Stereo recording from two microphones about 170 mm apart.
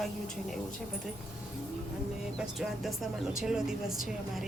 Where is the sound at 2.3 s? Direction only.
Centre (ahead or behind).